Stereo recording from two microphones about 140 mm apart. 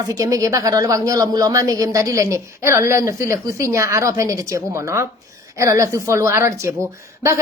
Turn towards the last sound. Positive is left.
turn(degrees=-20)  # may be behind; listen again after turning